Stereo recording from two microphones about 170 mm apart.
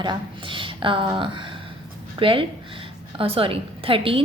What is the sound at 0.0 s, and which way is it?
A woman's voice, 30° right (ahead or behind).